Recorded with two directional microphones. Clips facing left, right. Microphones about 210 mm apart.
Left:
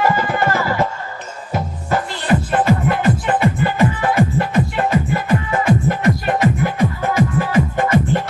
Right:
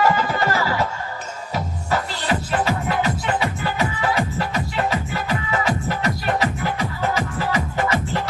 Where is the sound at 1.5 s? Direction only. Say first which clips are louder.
Left 4 dB; 55° left (ahead or behind).